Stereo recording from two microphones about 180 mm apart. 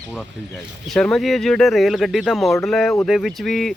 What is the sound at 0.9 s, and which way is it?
Speech, 5° left (ahead or behind).